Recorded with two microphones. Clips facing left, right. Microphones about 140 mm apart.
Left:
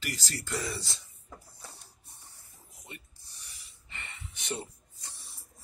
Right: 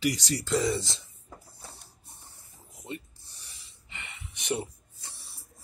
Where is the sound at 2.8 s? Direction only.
30° right (ahead or behind).